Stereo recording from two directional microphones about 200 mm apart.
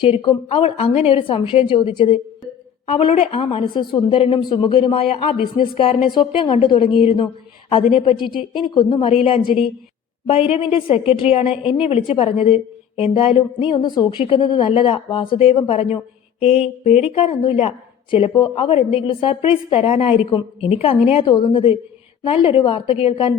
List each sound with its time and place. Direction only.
0.0 s speech: 25° left (ahead or behind)
8.7 s speech: 25° left (ahead or behind)
16.4 s mantra: 30° left (ahead or behind)
18.1 s speech: 25° left (ahead or behind)